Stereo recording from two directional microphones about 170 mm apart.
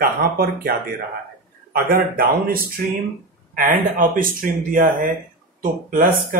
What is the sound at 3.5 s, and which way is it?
Speech, 55° right (ahead or behind).